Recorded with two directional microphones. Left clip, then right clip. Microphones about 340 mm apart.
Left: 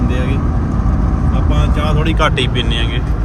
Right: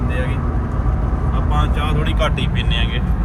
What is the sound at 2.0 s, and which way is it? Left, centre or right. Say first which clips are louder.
Speech: left 8 dB; left.